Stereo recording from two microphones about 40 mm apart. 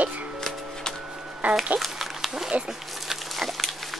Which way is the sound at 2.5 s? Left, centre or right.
Right.